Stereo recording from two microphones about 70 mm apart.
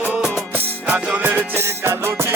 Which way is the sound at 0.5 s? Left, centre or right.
Right.